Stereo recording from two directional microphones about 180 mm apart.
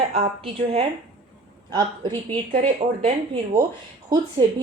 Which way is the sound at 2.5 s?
35° right (ahead or behind).